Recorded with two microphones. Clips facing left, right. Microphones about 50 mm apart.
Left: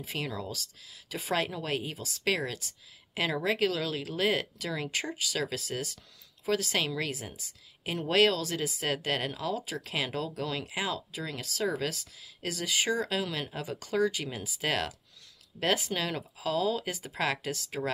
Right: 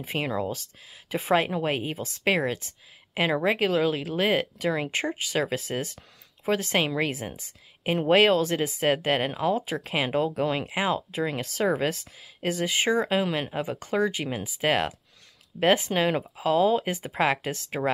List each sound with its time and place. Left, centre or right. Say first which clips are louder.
0.0 s speech: right 7 dB; right